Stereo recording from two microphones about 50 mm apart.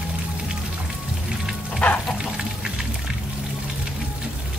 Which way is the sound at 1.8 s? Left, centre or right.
Left.